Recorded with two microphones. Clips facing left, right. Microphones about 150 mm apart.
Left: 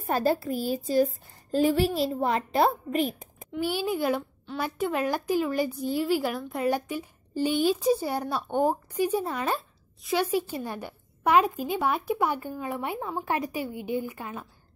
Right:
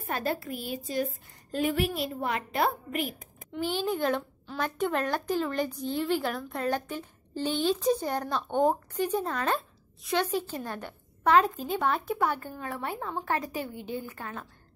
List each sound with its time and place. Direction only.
0.0 s a woman's voice: 35° left (ahead or behind)
3.5 s a child's voice: 10° left (ahead or behind)